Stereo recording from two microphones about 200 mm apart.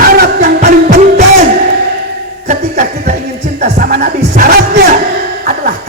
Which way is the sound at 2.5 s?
40° right (ahead or behind).